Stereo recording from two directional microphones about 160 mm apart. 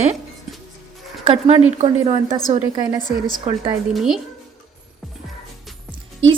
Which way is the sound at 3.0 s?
25° left (ahead or behind).